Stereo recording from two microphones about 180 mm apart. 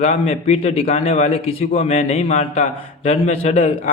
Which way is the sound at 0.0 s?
35° left (ahead or behind).